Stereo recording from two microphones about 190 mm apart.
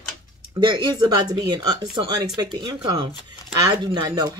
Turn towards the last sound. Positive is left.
turn(degrees=-20)  # may be behind; listen again after turning